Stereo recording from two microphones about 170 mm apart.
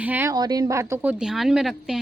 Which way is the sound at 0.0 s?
10° right (ahead or behind).